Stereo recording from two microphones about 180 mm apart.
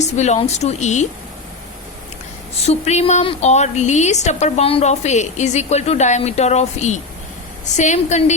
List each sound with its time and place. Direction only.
0.0 s a woman's voice: 40° left (ahead or behind)
2.6 s a woman's voice: 35° left (ahead or behind)